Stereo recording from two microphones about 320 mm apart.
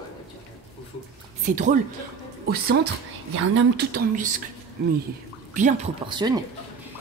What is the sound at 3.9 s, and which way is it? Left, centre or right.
Speech, right.